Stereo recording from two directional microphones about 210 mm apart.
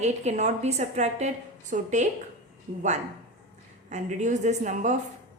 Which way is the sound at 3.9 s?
35° right (ahead or behind).